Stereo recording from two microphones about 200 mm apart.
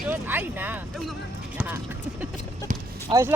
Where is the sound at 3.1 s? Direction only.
15° right (ahead or behind).